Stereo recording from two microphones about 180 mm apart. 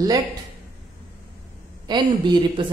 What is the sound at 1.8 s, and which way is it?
Speech, 25° right (ahead or behind).